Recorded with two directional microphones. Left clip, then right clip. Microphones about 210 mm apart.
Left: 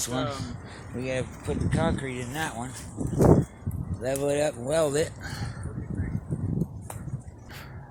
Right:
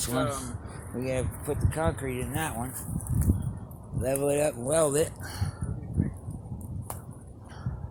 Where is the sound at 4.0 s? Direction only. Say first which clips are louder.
Even; centre (ahead or behind).